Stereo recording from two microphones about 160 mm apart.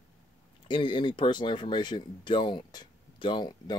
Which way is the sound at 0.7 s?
30° left (ahead or behind).